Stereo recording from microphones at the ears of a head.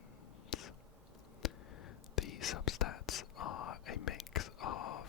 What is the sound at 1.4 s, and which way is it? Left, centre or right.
Whispering, left.